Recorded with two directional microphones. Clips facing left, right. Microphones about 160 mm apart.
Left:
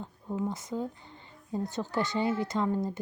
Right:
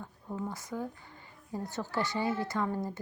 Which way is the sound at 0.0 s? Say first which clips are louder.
Left 5 dB; 15° left (ahead or behind).